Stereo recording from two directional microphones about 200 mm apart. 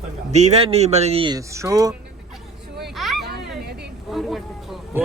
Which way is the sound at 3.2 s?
55° right (ahead or behind).